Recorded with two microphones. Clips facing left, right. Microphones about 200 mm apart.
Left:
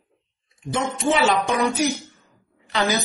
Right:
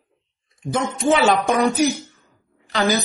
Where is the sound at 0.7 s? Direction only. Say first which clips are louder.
Right 3 dB; 45° right (ahead or behind).